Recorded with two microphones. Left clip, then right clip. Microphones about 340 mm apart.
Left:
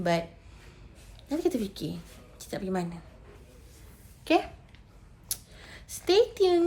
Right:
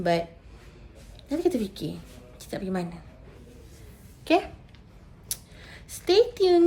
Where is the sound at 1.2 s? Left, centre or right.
Centre.